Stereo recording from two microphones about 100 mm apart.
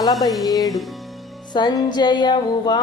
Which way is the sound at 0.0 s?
40° left (ahead or behind).